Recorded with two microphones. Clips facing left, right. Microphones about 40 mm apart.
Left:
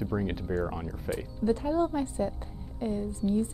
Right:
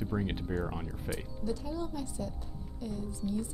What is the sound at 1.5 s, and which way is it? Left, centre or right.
A woman's voice, left.